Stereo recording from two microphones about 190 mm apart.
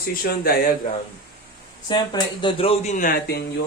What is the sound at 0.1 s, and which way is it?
Speech, 50° left (ahead or behind).